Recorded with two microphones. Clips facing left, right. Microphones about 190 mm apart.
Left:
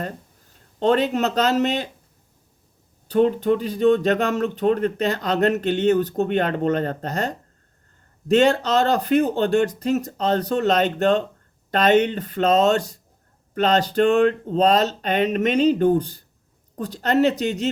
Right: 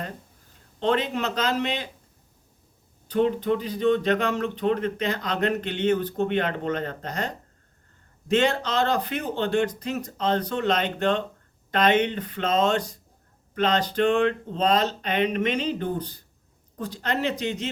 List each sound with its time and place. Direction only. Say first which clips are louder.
0.8 s speech: left 5 dB; 40° left (ahead or behind)
3.1 s speech: left 4 dB; 45° left (ahead or behind)